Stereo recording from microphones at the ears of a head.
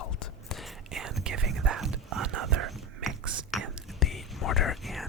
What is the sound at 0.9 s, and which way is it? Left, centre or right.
Whispering, right.